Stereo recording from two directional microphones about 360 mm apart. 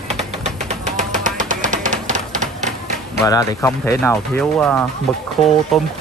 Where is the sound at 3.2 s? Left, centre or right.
Centre.